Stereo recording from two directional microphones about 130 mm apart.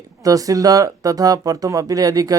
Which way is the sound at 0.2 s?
25° right (ahead or behind).